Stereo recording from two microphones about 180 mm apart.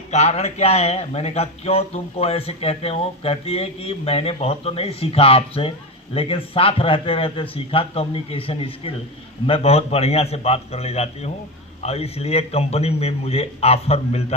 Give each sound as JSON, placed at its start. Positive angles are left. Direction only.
{"t": 0.1, "sound": "speech", "side_deg": 35}